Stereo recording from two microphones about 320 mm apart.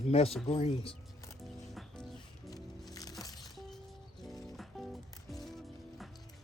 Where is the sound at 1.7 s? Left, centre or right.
Centre.